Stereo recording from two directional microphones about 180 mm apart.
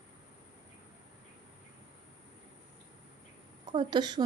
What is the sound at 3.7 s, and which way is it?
Speech, 25° right (ahead or behind).